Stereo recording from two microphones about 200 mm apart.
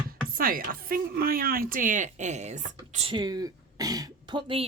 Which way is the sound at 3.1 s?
20° right (ahead or behind).